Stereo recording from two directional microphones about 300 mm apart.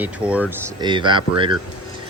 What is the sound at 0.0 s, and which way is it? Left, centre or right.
Speech, centre.